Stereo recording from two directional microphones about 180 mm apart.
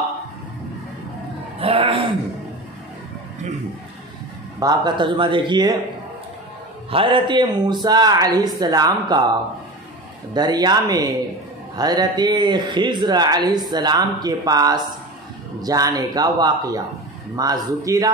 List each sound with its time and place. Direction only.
1.6 s a sound: 30° right (ahead or behind)
4.6 s speech: 25° right (ahead or behind)
6.9 s speech: 30° right (ahead or behind)
10.3 s speech: 20° right (ahead or behind)